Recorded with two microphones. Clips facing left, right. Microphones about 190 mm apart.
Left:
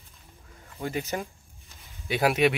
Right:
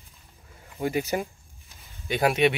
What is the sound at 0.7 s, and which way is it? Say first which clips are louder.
Speech: right 4 dB; 15° right (ahead or behind).